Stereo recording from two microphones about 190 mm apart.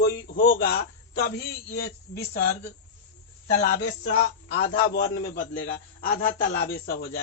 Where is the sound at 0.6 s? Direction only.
50° left (ahead or behind).